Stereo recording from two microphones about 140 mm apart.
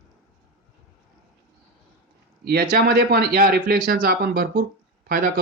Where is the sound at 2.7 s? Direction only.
90° right.